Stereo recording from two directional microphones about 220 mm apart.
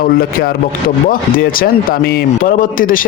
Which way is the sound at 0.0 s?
40° left (ahead or behind).